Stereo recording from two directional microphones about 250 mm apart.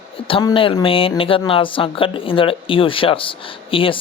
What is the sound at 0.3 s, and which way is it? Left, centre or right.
Speech, left.